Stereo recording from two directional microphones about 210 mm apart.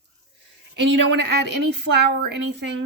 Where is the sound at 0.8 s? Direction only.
55° right (ahead or behind).